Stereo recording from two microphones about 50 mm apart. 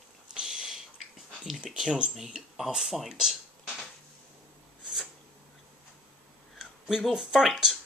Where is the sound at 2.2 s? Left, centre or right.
Centre.